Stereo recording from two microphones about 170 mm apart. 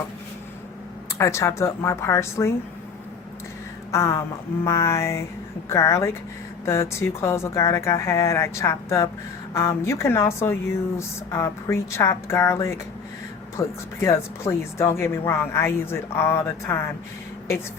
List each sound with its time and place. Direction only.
1.2 s speech: 15° left (ahead or behind)
3.9 s speech: 15° left (ahead or behind)